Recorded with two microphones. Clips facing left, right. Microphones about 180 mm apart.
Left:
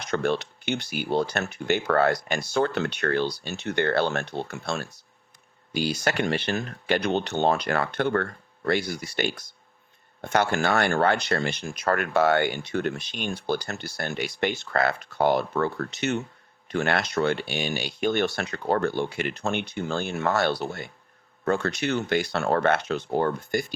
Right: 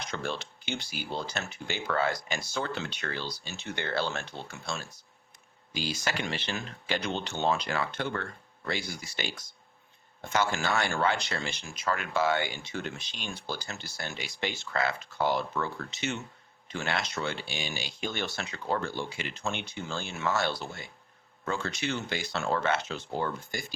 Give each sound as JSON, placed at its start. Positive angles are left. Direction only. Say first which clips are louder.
{"t": 0.1, "sound": "speech", "louder": "left 12 dB", "side_deg": 65}